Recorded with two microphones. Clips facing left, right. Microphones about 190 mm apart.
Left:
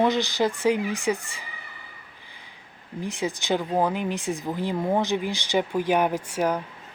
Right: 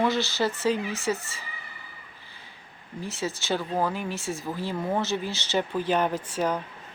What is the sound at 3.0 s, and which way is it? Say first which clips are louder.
Speech: left 3 dB; 15° left (ahead or behind).